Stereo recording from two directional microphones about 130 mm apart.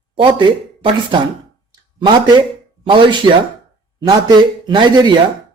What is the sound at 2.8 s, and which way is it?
A man's voice, 40° right (ahead or behind).